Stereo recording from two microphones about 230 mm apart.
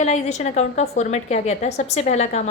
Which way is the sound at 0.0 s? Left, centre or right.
Left.